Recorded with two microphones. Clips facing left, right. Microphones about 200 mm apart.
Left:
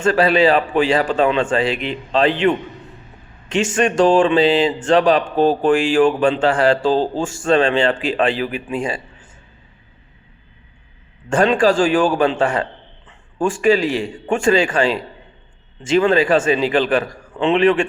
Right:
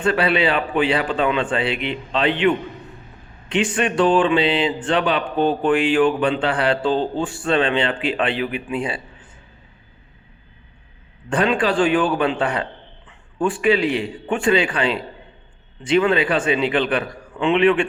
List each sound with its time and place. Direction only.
0.0 s a man's voice: 45° left (ahead or behind)
3.5 s a man's voice: 45° left (ahead or behind)
11.5 s a man's voice: 45° left (ahead or behind)